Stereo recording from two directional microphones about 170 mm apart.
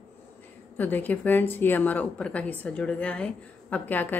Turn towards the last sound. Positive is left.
turn(degrees=10)  # may be behind; listen again after turning